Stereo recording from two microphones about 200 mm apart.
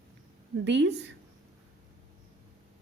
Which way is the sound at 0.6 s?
60° right (ahead or behind).